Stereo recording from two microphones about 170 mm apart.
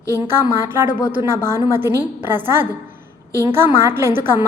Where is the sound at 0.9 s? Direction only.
25° left (ahead or behind).